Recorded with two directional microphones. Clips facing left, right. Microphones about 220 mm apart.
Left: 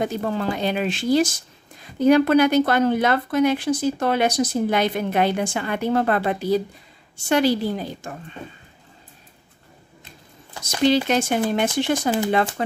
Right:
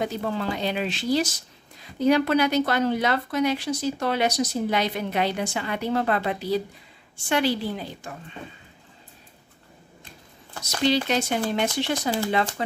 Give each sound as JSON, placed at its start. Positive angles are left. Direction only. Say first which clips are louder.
{"t": 0.0, "sound": "a woman's voice", "louder": "left 3 dB", "side_deg": 50}
{"t": 11.1, "sound": "speech", "louder": "left 4 dB", "side_deg": 50}